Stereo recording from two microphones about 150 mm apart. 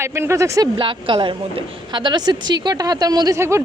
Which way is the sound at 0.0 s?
20° right (ahead or behind).